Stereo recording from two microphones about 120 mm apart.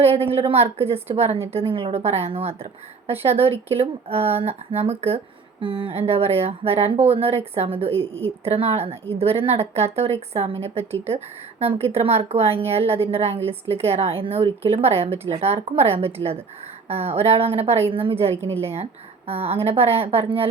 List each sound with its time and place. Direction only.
0.3 s speech: 55° right (ahead or behind)